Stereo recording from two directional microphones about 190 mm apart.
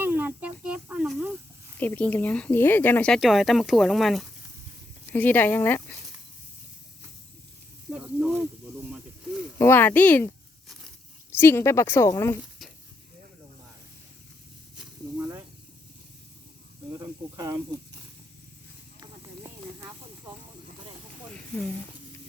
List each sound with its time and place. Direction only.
0.0 s snake: 10° right (ahead or behind)
1.8 s speech: 10° left (ahead or behind)
7.9 s speech: 5° right (ahead or behind)
9.6 s speech: 10° left (ahead or behind)
11.3 s speech: 10° left (ahead or behind)
15.2 s snake: 15° right (ahead or behind)
17.0 s speech: 20° right (ahead or behind)
18.9 s clip-clop: 20° right (ahead or behind)